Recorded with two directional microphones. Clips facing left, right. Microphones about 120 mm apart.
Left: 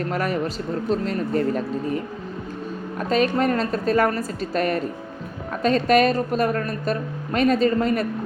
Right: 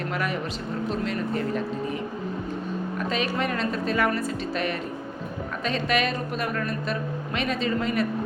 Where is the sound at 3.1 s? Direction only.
40° left (ahead or behind).